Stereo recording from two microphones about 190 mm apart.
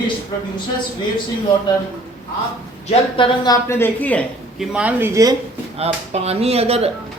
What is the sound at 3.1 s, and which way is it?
A woman's voice, 25° left (ahead or behind).